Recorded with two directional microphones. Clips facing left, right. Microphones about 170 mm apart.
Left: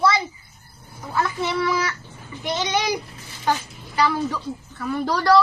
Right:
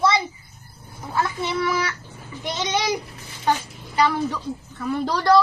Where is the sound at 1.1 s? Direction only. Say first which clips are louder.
Left 1 dB; 20° right (ahead or behind).